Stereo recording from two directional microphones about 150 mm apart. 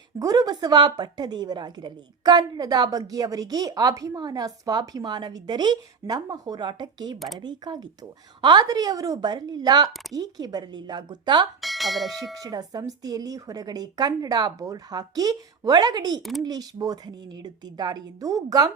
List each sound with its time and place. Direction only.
0.2 s a woman's voice: 25° right (ahead or behind)
11.6 s speech: centre (ahead or behind)
12.3 s a woman's voice: 25° right (ahead or behind)